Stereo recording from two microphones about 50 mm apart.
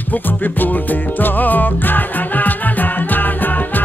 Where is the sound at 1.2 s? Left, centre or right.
Left.